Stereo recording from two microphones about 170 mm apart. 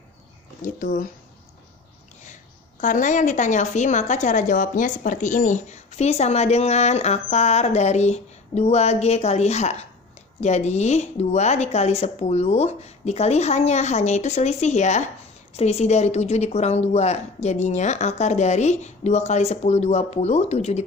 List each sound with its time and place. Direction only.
0.6 s speech: 55° left (ahead or behind)
2.8 s a woman's voice: 50° left (ahead or behind)